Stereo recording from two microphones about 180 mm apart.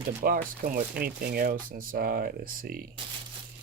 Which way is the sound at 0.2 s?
50° right (ahead or behind).